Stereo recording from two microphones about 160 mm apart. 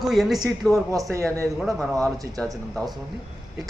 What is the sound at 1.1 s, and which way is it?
Speech, 15° right (ahead or behind).